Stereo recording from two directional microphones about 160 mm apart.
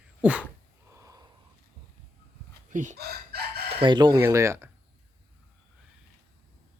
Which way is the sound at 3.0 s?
80° right.